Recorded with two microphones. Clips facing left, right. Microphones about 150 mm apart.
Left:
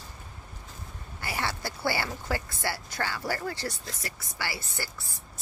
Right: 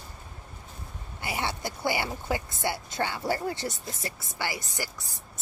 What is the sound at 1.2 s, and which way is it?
Speech, 20° right (ahead or behind).